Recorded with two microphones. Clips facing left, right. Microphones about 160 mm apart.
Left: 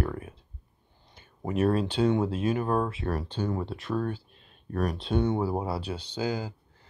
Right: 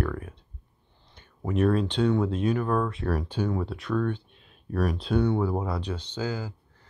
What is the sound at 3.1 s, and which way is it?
Speech, 10° right (ahead or behind).